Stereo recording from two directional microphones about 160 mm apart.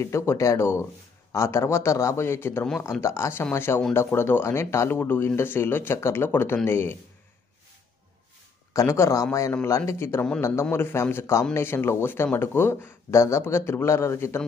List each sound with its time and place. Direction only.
0.0 s speech: 15° left (ahead or behind)
8.7 s speech: 15° left (ahead or behind)